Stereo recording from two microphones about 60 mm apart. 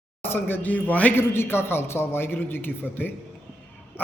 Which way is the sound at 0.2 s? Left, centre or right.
Left.